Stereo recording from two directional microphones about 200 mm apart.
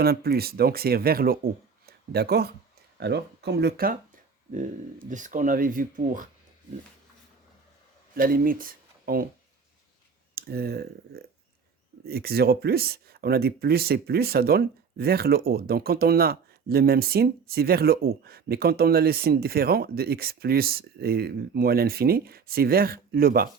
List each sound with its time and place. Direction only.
0.0 s speech: 50° right (ahead or behind)
5.0 s speech: 40° right (ahead or behind)
8.1 s speech: 45° right (ahead or behind)
10.3 s speech: 50° right (ahead or behind)